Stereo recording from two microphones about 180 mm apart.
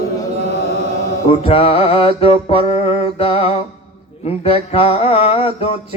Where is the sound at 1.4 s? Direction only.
30° left (ahead or behind).